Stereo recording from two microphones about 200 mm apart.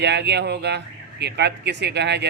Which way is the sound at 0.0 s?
60° right (ahead or behind).